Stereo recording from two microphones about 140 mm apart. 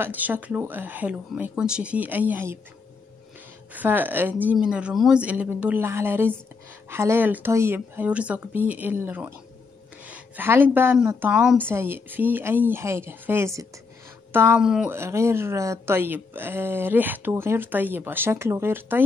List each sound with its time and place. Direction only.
0.0 s speech: 15° right (ahead or behind)
3.7 s speech: 15° right (ahead or behind)
14.6 s speech: 5° right (ahead or behind)
14.9 s speech: 20° right (ahead or behind)